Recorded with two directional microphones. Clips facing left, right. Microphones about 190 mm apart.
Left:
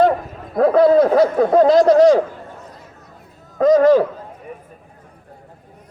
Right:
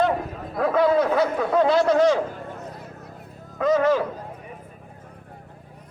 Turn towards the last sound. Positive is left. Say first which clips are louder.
# left 8 dB
turn(degrees=35)  # may be behind; listen again after turning